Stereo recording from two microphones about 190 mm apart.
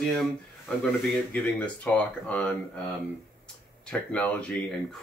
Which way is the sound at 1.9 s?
5° left (ahead or behind).